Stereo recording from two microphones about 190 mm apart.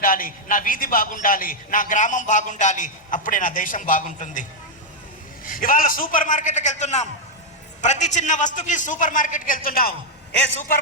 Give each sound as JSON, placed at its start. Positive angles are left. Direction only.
{"t": 0.0, "sound": "a man's voice", "side_deg": 45}
{"t": 5.5, "sound": "a man's voice", "side_deg": 45}